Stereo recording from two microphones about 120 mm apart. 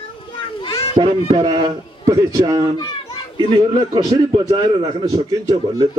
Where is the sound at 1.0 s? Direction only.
40° right (ahead or behind).